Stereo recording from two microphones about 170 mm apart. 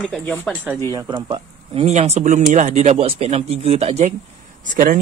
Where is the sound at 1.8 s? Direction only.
40° right (ahead or behind).